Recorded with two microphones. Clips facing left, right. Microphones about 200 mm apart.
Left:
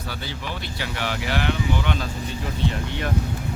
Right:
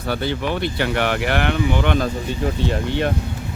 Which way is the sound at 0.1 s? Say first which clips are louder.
Right 12 dB; 60° right (ahead or behind).